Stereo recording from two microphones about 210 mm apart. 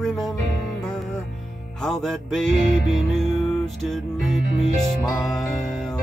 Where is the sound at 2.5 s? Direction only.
35° right (ahead or behind).